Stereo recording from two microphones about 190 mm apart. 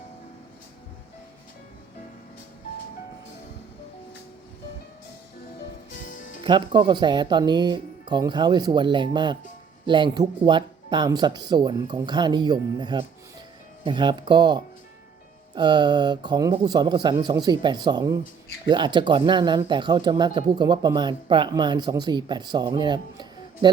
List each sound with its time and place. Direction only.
6.0 s music: 45° left (ahead or behind)
6.4 s speech: 25° right (ahead or behind)